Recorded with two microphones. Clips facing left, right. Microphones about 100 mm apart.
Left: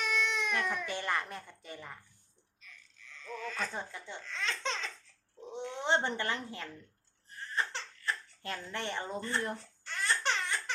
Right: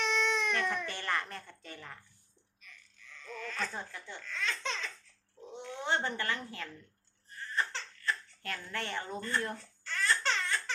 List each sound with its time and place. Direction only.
0.0 s baby cry: 5° left (ahead or behind)
0.9 s a woman's voice: 15° left (ahead or behind)
3.2 s speech: centre (ahead or behind)
3.7 s speech: 20° left (ahead or behind)
7.5 s baby laughter: 20° left (ahead or behind)